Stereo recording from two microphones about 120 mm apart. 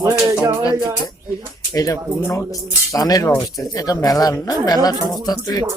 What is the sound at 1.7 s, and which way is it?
Speech, 30° left (ahead or behind).